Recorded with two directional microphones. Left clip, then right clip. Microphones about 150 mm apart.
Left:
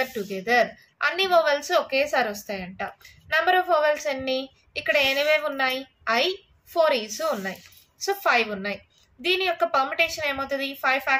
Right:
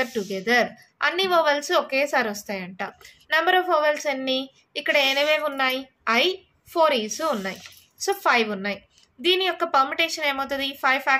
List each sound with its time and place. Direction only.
0.0 s a woman's voice: 35° right (ahead or behind)